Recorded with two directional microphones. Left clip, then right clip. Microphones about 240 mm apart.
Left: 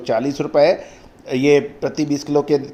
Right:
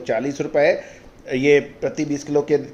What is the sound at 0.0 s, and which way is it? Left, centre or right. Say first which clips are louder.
A man's voice: left 3 dB; left.